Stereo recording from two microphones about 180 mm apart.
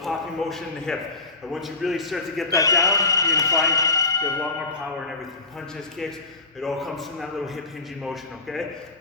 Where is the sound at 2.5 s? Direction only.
20° left (ahead or behind).